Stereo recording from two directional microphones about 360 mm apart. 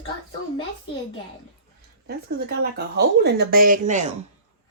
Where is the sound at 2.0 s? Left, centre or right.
Right.